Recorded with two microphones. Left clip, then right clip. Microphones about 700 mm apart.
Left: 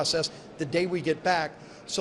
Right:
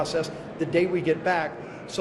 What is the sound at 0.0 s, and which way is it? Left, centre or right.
A man's voice, left.